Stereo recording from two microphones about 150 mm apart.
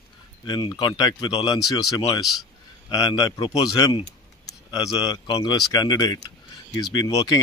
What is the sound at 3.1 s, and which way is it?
Speech, 25° left (ahead or behind).